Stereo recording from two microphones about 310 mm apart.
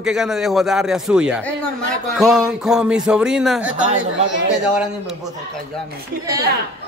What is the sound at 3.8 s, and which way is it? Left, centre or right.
Speech, right.